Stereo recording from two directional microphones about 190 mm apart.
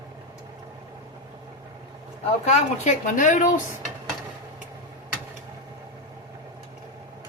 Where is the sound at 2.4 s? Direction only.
35° left (ahead or behind).